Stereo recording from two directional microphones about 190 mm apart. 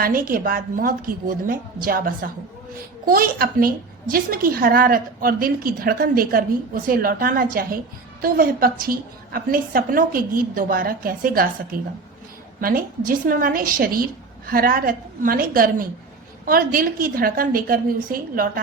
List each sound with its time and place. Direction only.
0.0 s a woman's voice: 50° right (ahead or behind)